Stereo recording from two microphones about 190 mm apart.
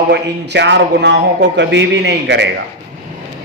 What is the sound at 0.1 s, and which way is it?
A man's voice, 65° right (ahead or behind).